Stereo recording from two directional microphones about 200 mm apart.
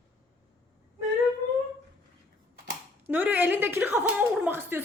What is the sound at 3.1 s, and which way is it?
A woman's voice, 10° right (ahead or behind).